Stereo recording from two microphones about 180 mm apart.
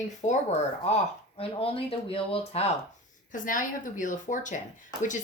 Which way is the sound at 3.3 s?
45° left (ahead or behind).